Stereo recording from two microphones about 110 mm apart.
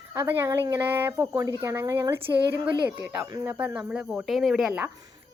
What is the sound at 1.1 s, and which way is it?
A woman's voice, 30° right (ahead or behind).